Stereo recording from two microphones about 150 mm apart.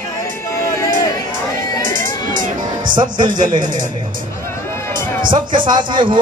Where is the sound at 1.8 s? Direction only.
65° right (ahead or behind).